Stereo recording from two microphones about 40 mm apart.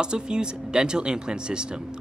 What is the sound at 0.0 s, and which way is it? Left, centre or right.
Speech, right.